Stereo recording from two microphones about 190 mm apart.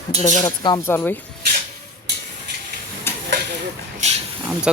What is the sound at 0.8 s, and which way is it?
Speech, 10° left (ahead or behind).